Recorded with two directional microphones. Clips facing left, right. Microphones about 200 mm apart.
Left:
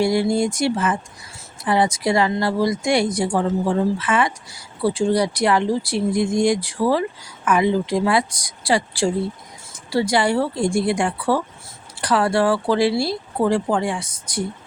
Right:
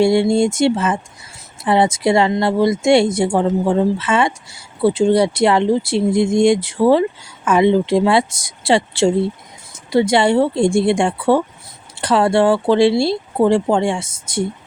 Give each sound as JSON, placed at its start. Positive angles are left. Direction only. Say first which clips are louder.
{"t": 0.0, "sound": "speech", "louder": "right 5 dB", "side_deg": -25}